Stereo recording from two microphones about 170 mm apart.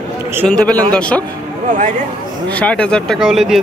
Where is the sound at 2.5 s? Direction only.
5° left (ahead or behind).